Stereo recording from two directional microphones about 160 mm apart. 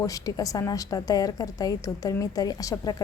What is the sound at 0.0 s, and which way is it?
A woman's voice, 20° left (ahead or behind).